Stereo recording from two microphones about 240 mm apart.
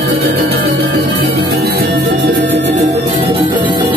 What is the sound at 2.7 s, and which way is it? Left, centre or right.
Music, right.